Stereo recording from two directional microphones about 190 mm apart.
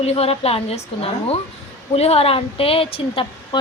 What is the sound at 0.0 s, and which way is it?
Speech, 35° left (ahead or behind).